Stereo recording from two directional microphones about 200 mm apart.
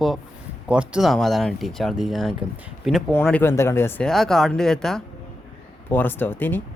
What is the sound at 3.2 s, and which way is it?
Speech, 10° left (ahead or behind).